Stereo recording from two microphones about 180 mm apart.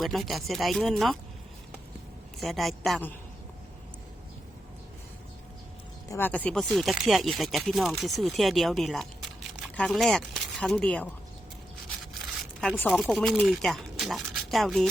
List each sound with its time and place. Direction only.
0.0 s speech: centre (ahead or behind)
2.4 s speech: centre (ahead or behind)
6.1 s speech: 10° left (ahead or behind)
12.5 s speech: 5° left (ahead or behind)